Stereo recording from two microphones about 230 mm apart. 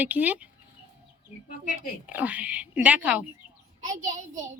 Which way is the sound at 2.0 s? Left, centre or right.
Centre.